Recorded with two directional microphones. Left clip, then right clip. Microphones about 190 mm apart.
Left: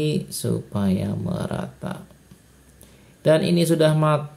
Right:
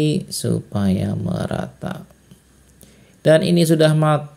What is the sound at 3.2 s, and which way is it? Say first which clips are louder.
Speech: right 4 dB; 25° right (ahead or behind).